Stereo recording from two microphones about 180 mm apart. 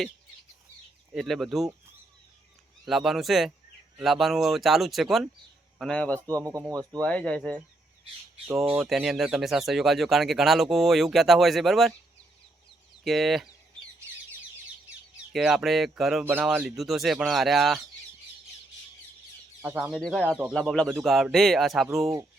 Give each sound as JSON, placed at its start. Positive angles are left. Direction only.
{"t": 1.1, "sound": "speech", "side_deg": 0}
{"t": 2.8, "sound": "a man's voice", "side_deg": 0}
{"t": 6.4, "sound": "speech", "side_deg": -20}
{"t": 7.0, "sound": "speech", "side_deg": 5}
{"t": 8.7, "sound": "speech", "side_deg": -5}
{"t": 13.1, "sound": "speech", "side_deg": 0}
{"t": 15.3, "sound": "speech", "side_deg": 0}
{"t": 19.6, "sound": "speech", "side_deg": -5}
{"t": 21.8, "sound": "speech", "side_deg": -15}